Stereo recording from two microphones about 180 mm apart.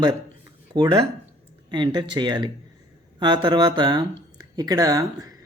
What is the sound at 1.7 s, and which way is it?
Speech, 25° right (ahead or behind).